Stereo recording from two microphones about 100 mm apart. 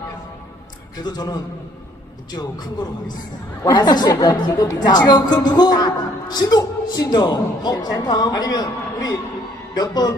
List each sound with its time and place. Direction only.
1.0 s a woman's voice: 45° left (ahead or behind)
3.7 s a woman's voice: 45° left (ahead or behind)